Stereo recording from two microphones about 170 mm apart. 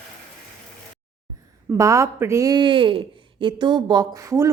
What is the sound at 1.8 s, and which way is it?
Speech, 15° right (ahead or behind).